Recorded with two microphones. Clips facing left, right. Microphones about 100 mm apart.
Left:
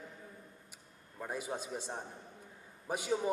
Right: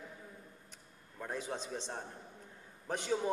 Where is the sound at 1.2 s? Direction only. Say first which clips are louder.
Left 1 dB; 10° left (ahead or behind).